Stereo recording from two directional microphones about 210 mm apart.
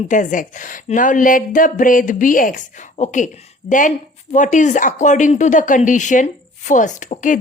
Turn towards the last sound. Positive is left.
turn(degrees=35)  # may be behind; listen again after turning